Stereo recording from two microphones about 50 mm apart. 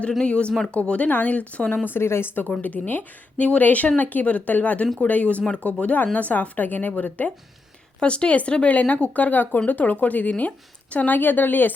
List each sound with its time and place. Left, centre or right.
0.2 s speech: left
1.9 s speech: left
2.6 s speech: left
8.0 s speech: left